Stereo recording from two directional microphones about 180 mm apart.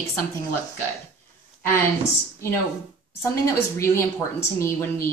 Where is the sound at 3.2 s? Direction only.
15° left (ahead or behind).